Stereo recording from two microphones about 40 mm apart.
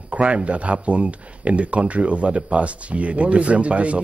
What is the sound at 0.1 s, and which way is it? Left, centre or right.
Speech, right.